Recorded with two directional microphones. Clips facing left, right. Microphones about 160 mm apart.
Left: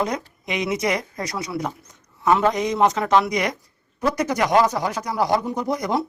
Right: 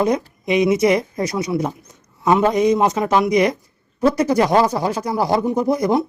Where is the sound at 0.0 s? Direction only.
25° right (ahead or behind).